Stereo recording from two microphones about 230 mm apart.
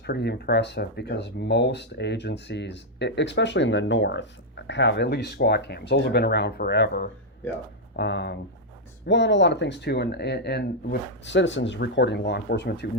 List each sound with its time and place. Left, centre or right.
0.0 s speech: left